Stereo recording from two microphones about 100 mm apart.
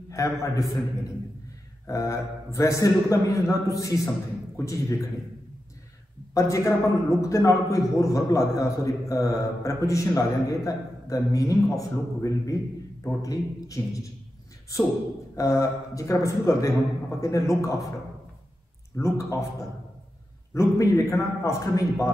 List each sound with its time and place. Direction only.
0.1 s a man's voice: 30° left (ahead or behind)
6.3 s a man's voice: 30° left (ahead or behind)
15.3 s a man's voice: 30° left (ahead or behind)
18.9 s a man's voice: 30° left (ahead or behind)
20.5 s a man's voice: 30° left (ahead or behind)